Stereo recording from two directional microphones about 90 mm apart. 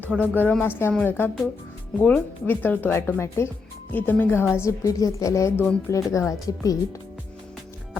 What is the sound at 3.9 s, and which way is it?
A woman's voice, 20° left (ahead or behind).